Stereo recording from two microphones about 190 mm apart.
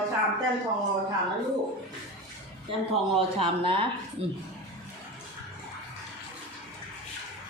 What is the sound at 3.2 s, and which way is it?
Speech, 30° right (ahead or behind).